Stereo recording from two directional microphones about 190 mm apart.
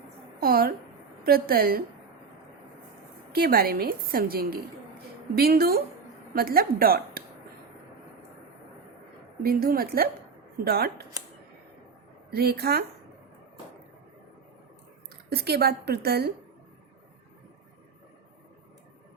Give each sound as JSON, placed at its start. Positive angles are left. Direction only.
{"t": 0.4, "sound": "a woman's voice", "side_deg": -50}
{"t": 3.3, "sound": "a woman's voice", "side_deg": -55}
{"t": 9.4, "sound": "a woman's voice", "side_deg": -55}
{"t": 12.3, "sound": "a woman's voice", "side_deg": -55}
{"t": 15.3, "sound": "a woman's voice", "side_deg": -55}